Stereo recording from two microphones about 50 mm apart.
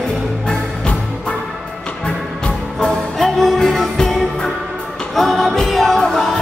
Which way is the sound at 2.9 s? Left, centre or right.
Centre.